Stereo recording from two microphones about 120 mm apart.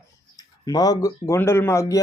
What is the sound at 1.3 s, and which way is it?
Speech, 20° left (ahead or behind).